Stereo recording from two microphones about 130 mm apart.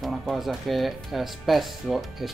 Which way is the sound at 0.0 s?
Centre (ahead or behind).